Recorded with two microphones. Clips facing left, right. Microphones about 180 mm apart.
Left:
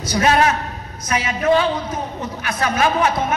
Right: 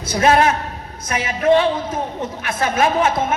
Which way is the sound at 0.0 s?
30° right (ahead or behind).